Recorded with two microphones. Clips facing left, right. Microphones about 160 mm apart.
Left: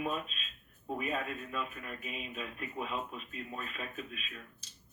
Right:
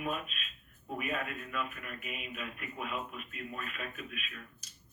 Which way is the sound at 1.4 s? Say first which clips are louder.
Even; 30° left (ahead or behind).